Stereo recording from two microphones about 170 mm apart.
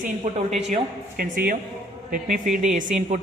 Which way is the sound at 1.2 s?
60° right (ahead or behind).